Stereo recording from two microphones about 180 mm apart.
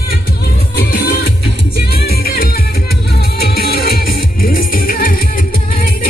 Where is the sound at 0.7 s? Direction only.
60° left (ahead or behind).